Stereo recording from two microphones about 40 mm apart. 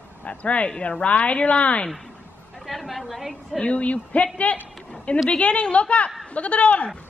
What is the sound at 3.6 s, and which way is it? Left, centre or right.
Speech, left.